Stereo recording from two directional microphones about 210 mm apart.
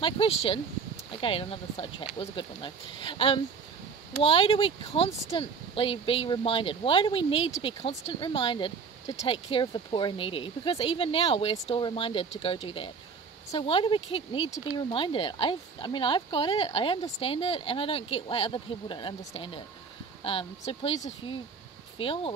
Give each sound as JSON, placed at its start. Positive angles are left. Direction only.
{"t": 0.0, "sound": "speech", "side_deg": 25}